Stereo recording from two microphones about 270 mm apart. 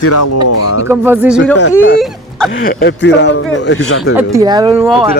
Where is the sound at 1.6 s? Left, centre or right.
Left.